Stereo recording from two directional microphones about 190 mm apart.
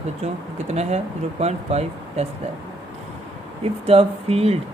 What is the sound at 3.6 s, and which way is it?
Speech, 30° right (ahead or behind).